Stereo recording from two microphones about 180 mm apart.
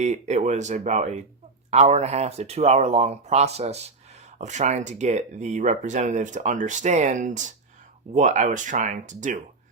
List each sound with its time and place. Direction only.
0.0 s speech: 40° right (ahead or behind)